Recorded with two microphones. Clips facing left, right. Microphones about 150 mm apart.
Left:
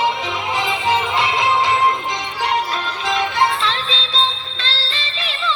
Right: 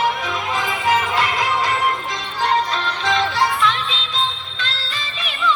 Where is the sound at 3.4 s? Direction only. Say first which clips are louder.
Even; 30° left (ahead or behind).